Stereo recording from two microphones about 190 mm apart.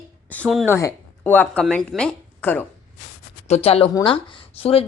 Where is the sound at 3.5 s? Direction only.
30° left (ahead or behind).